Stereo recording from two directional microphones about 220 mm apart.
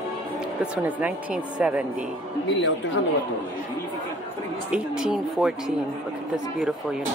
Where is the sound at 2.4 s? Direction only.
55° left (ahead or behind).